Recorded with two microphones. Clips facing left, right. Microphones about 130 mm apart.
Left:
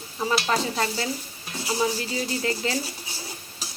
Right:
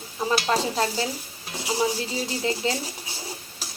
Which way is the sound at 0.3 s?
35° right (ahead or behind).